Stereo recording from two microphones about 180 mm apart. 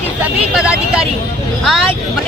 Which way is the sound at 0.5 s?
5° right (ahead or behind).